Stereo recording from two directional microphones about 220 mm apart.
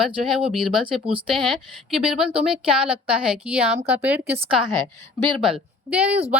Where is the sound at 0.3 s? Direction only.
Centre (ahead or behind).